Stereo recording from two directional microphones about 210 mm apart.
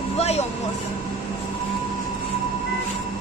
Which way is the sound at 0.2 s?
30° left (ahead or behind).